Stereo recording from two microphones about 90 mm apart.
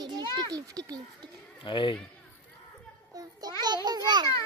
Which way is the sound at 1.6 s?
65° left (ahead or behind).